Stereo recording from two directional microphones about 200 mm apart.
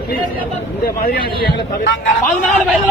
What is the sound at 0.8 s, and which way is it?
Speech, 50° left (ahead or behind).